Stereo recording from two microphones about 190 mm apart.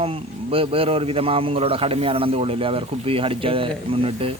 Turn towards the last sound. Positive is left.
turn(degrees=-30)  # may be behind; listen again after turning